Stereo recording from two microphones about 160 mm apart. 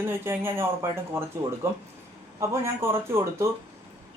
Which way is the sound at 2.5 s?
15° right (ahead or behind).